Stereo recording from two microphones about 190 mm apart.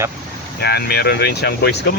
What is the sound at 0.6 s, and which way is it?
Speech, 60° left (ahead or behind).